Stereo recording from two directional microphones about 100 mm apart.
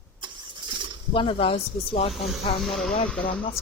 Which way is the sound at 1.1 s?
65° left (ahead or behind).